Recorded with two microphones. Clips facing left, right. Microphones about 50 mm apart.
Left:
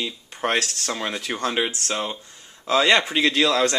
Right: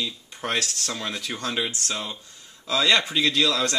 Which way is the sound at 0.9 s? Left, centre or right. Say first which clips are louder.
Left 4 dB; centre.